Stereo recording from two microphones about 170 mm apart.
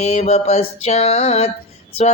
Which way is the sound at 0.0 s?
40° left (ahead or behind).